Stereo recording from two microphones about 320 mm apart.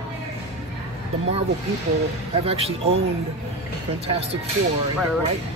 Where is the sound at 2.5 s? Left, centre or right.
Centre.